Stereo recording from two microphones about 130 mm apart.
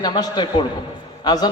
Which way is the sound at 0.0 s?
35° left (ahead or behind).